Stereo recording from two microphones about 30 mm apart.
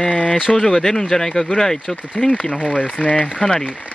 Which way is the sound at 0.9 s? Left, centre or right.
Centre.